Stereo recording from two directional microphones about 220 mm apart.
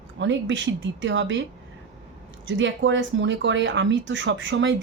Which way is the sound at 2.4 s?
55° right (ahead or behind).